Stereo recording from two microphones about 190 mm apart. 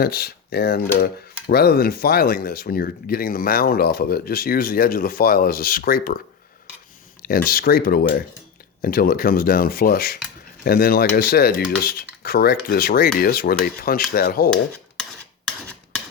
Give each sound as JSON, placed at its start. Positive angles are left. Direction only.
{"t": 0.0, "sound": "speech", "side_deg": 55}
{"t": 7.2, "sound": "speech", "side_deg": 50}